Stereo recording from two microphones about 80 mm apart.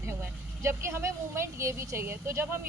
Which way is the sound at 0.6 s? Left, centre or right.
Right.